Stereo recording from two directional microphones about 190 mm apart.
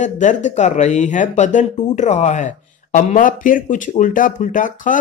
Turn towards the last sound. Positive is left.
turn(degrees=45)  # may be behind; listen again after turning